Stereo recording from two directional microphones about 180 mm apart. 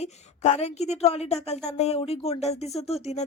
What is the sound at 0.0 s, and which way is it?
A woman's voice, 35° left (ahead or behind).